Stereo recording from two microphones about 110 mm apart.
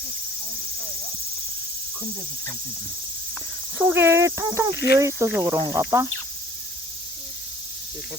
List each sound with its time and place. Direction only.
3.8 s speech: 20° right (ahead or behind)